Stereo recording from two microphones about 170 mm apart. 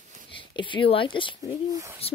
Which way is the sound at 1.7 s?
15° right (ahead or behind).